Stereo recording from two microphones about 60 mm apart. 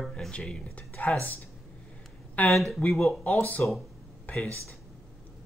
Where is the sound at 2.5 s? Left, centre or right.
Centre.